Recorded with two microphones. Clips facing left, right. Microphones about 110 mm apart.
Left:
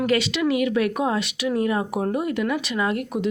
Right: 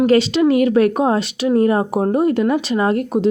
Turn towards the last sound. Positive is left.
turn(degrees=-35)  # may be behind; listen again after turning